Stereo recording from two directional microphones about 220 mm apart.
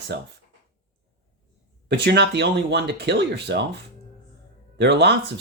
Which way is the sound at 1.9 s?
50° right (ahead or behind).